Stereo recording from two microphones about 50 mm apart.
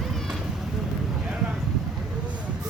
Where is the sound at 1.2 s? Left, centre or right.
Centre.